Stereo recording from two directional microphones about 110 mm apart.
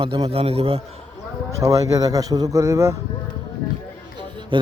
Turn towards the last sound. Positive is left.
turn(degrees=-45)  # may be behind; listen again after turning